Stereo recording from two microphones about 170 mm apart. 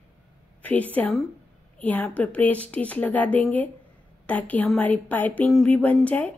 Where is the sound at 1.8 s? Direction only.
10° left (ahead or behind).